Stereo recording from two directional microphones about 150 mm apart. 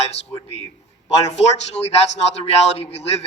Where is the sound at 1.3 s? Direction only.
45° left (ahead or behind).